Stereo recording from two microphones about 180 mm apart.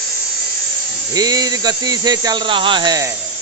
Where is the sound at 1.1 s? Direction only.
20° right (ahead or behind).